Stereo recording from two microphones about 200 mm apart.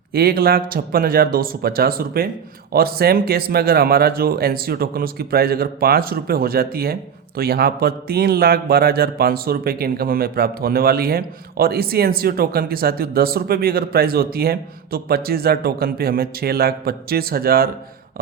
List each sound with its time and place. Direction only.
0.1 s speech: 50° right (ahead or behind)